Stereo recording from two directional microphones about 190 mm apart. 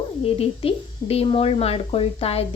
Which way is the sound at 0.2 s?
30° left (ahead or behind).